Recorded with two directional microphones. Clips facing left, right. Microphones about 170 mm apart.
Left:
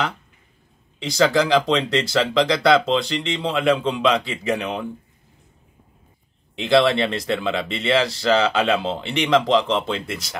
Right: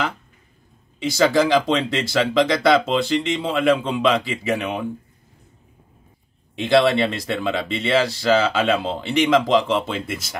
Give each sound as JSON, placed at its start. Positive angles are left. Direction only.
{"t": 0.9, "sound": "speech", "side_deg": -5}
{"t": 6.5, "sound": "speech", "side_deg": 0}